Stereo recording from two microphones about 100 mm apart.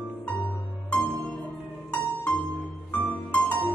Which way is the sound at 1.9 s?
15° left (ahead or behind).